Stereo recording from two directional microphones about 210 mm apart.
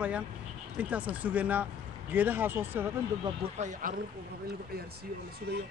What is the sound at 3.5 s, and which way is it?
Speech, 35° right (ahead or behind).